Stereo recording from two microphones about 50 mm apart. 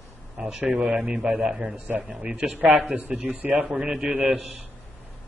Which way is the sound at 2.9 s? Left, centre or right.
Right.